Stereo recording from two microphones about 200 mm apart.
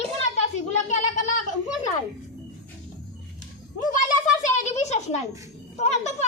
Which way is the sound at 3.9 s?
40° left (ahead or behind).